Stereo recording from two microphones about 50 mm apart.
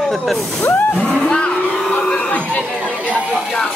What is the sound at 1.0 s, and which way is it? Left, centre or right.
Cattle, centre.